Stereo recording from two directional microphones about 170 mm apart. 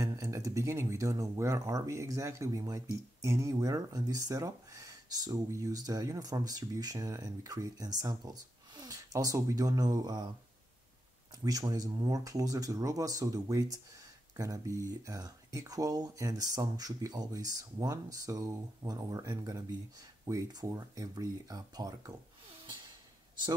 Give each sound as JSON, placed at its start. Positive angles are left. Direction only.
{"t": 0.0, "sound": "speech", "side_deg": -20}
{"t": 11.4, "sound": "speech", "side_deg": -20}